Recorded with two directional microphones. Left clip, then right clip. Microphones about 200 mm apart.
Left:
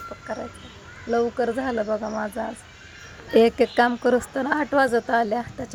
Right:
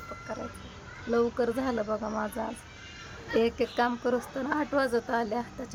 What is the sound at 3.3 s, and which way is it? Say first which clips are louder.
Speech: left 9 dB; 25° left (ahead or behind).